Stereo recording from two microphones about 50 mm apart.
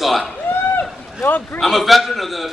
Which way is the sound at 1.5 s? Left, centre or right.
Centre.